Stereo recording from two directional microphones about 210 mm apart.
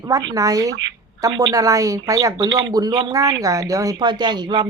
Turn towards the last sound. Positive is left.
turn(degrees=-20)  # may be behind; listen again after turning